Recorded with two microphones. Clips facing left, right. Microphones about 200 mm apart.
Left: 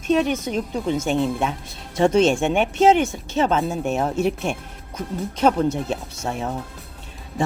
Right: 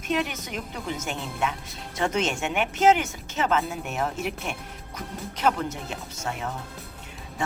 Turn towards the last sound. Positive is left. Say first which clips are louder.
# left 5 dB
turn(degrees=30)  # may be behind; listen again after turning